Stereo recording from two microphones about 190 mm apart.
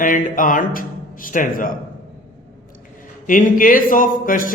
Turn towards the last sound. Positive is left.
turn(degrees=45)  # may be behind; listen again after turning